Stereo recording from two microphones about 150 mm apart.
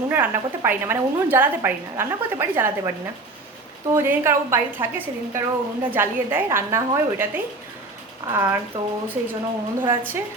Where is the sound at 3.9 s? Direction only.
15° right (ahead or behind).